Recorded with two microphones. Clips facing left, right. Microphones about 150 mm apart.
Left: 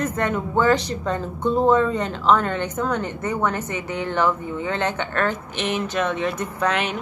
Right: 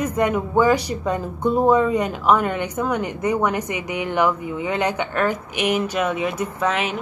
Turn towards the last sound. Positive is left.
turn(degrees=0)  # may be behind; listen again after turning